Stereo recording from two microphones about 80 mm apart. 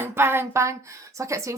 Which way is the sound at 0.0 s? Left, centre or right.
Right.